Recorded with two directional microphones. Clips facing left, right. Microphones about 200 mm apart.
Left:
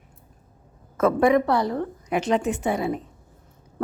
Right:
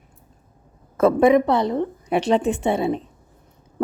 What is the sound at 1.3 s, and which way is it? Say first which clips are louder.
A woman's voice: right 3 dB; 20° right (ahead or behind).